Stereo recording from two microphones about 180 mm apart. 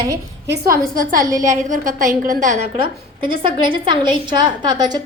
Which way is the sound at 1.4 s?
45° right (ahead or behind).